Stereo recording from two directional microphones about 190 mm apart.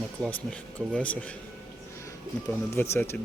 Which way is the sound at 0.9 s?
5° left (ahead or behind).